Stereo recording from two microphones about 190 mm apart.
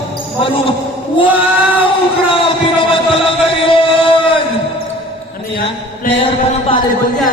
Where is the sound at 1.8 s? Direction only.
25° left (ahead or behind).